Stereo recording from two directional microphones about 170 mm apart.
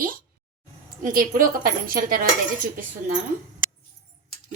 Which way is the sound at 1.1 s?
55° right (ahead or behind).